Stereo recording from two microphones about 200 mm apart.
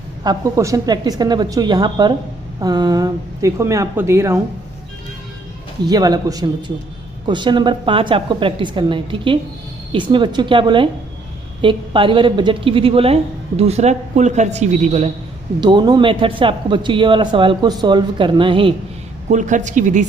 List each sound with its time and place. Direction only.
0.3 s speech: 15° right (ahead or behind)
5.8 s a woman's voice: 20° right (ahead or behind)
15.6 s speech: 20° right (ahead or behind)
19.3 s a woman's voice: 40° right (ahead or behind)